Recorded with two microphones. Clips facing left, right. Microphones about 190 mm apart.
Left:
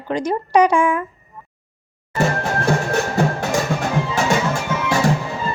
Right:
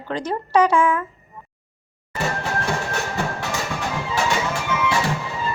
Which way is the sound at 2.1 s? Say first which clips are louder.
Left 5 dB; 45° left (ahead or behind).